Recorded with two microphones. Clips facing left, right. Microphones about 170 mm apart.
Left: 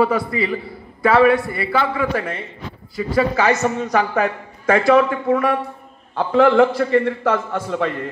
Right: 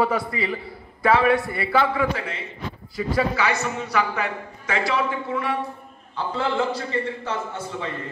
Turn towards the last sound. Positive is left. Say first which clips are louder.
# left 8 dB
turn(degrees=80)